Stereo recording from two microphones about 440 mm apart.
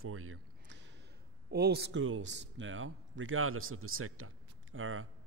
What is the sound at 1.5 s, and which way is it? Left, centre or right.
A man's voice, right.